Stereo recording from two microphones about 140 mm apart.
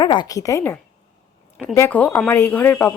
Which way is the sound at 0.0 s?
30° left (ahead or behind).